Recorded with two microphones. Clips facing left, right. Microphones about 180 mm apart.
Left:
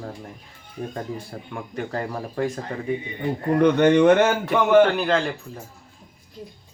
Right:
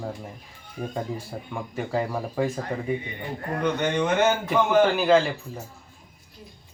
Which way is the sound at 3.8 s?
65° left (ahead or behind).